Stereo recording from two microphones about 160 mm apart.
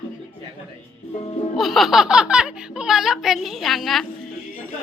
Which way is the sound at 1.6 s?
Centre (ahead or behind).